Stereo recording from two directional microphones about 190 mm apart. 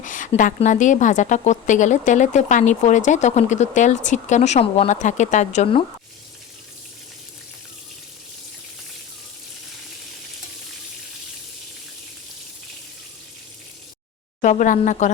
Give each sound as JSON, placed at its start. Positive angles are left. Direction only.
{"t": 0.0, "sound": "a woman's voice", "side_deg": 45}
{"t": 14.4, "sound": "a woman's voice", "side_deg": 40}